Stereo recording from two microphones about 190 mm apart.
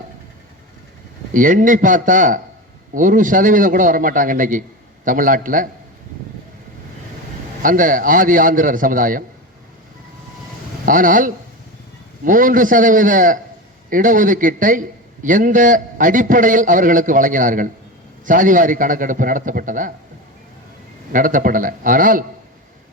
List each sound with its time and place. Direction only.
1.3 s a man's voice: 45° right (ahead or behind)
7.6 s a man's voice: 45° right (ahead or behind)
10.8 s a man's voice: 45° right (ahead or behind)
21.1 s a man's voice: 45° right (ahead or behind)